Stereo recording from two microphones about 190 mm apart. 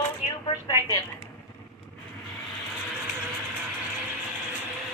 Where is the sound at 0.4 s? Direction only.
20° left (ahead or behind).